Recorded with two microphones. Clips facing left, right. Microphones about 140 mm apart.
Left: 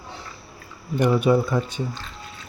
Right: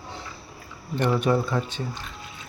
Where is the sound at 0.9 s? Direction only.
10° left (ahead or behind).